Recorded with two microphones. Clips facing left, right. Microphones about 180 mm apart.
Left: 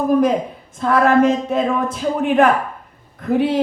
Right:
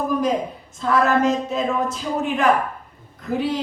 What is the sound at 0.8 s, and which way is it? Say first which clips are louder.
A woman's voice: left 4 dB; 55° left (ahead or behind).